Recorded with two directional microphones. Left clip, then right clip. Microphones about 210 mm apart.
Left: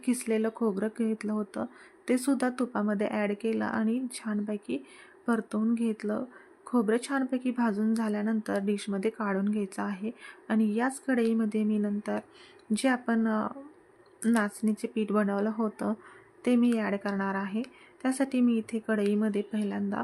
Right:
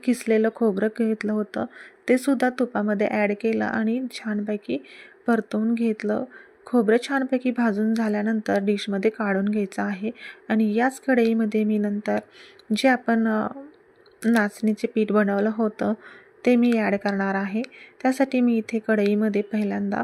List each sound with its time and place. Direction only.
0.0 s a woman's voice: 15° right (ahead or behind)